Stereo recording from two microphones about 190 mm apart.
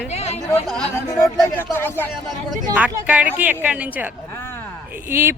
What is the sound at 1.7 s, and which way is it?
Speech, 10° left (ahead or behind).